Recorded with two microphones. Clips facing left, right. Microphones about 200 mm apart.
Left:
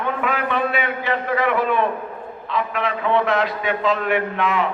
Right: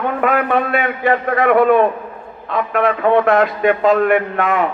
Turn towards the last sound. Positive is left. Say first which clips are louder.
# right 4 dB
turn(degrees=-50)  # may be behind; listen again after turning